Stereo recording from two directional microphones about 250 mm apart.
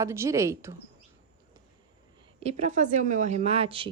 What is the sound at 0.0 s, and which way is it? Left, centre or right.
Speech, centre.